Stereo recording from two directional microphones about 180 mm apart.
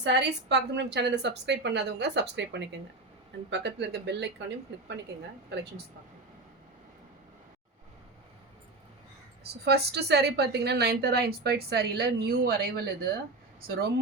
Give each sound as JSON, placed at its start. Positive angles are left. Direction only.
{"t": 0.0, "sound": "a woman's voice", "side_deg": -70}
{"t": 9.4, "sound": "a woman's voice", "side_deg": -65}